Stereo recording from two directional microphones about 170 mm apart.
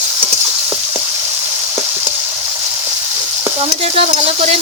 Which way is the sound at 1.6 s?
15° right (ahead or behind).